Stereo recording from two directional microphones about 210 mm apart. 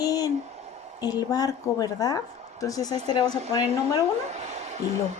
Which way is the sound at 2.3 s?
30° right (ahead or behind).